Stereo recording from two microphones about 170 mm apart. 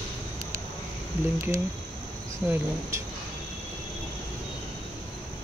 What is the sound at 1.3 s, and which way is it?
Speech, 20° right (ahead or behind).